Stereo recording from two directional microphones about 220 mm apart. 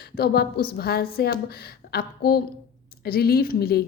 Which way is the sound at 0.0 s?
45° left (ahead or behind).